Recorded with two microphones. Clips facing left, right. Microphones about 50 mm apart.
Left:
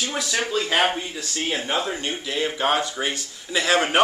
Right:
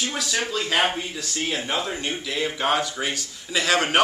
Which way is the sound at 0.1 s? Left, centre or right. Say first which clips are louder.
Left 2 dB; centre.